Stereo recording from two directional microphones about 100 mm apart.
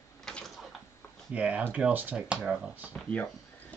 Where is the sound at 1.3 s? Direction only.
15° right (ahead or behind).